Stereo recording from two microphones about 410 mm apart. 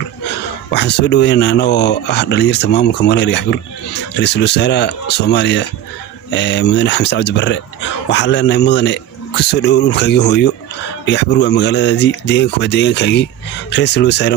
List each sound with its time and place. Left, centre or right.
0.3 s speech: left